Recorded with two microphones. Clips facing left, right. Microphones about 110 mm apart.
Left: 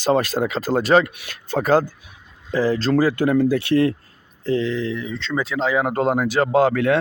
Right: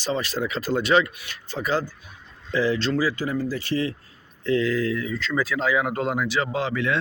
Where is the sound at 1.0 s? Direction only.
55° left (ahead or behind).